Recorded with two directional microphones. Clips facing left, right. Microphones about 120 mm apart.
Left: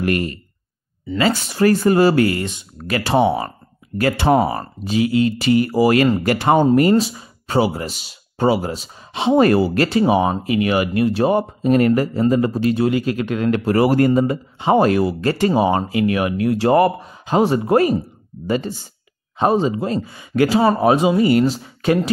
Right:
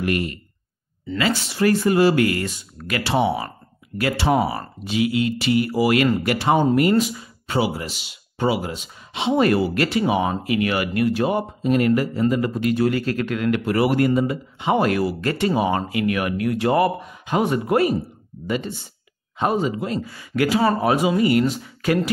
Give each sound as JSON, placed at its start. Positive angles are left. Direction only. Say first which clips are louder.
{"t": 0.0, "sound": "speech", "louder": "left 3 dB", "side_deg": 45}
{"t": 3.0, "sound": "speech", "louder": "left 4 dB", "side_deg": 45}
{"t": 6.2, "sound": "speech", "louder": "left 4 dB", "side_deg": 50}
{"t": 6.8, "sound": "speech", "louder": "left 3 dB", "side_deg": 30}
{"t": 11.2, "sound": "speech", "louder": "left 4 dB", "side_deg": 45}
{"t": 13.4, "sound": "speech", "louder": "left 4 dB", "side_deg": 35}
{"t": 15.2, "sound": "speech", "louder": "left 4 dB", "side_deg": 35}